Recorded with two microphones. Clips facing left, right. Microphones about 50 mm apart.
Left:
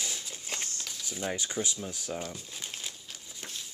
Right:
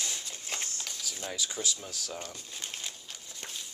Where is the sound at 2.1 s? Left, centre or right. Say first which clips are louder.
Left 3 dB; centre.